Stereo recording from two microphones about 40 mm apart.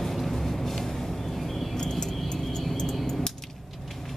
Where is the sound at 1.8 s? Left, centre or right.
Centre.